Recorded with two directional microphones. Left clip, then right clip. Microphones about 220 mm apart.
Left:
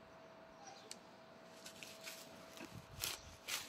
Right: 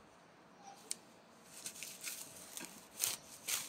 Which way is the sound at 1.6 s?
35° right (ahead or behind).